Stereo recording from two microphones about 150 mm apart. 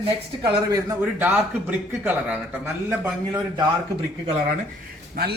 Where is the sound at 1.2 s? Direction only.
10° right (ahead or behind).